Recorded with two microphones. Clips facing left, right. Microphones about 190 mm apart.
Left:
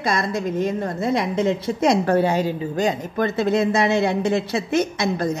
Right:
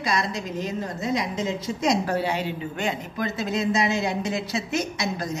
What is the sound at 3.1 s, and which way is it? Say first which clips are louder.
A woman's voice: left 7 dB; 55° left (ahead or behind).